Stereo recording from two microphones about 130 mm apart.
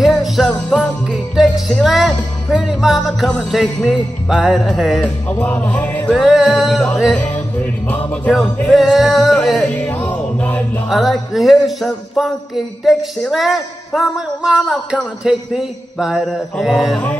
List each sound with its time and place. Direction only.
0.0 s music: centre (ahead or behind)
1.1 s music: centre (ahead or behind)
5.0 s speech: 10° left (ahead or behind)
6.2 s music: 5° right (ahead or behind); by 10.6 s 10° left (ahead or behind)
10.9 s music: centre (ahead or behind)